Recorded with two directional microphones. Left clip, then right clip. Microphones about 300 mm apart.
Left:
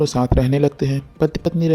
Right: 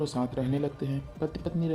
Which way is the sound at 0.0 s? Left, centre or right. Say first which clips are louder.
Left 12 dB; left.